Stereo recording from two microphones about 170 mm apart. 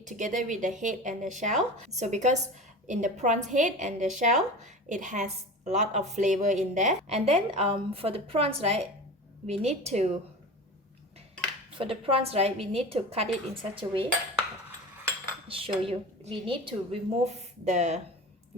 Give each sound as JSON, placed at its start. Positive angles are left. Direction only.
{"t": 0.0, "sound": "a woman's voice", "side_deg": -45}
{"t": 11.8, "sound": "a woman's voice", "side_deg": -30}
{"t": 15.4, "sound": "a woman's voice", "side_deg": -30}